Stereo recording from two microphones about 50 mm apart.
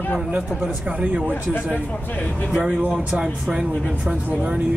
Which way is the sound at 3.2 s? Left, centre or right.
Centre.